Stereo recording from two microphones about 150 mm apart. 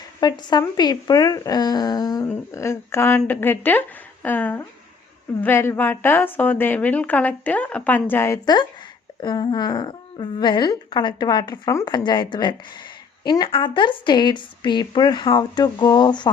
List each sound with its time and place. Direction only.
0.2 s a woman's voice: 30° left (ahead or behind)
9.2 s a woman's voice: 30° left (ahead or behind)